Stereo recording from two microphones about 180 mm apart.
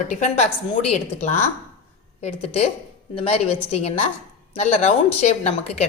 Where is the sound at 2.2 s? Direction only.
35° left (ahead or behind).